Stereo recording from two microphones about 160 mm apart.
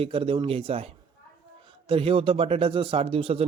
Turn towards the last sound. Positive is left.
turn(degrees=-35)  # may be behind; listen again after turning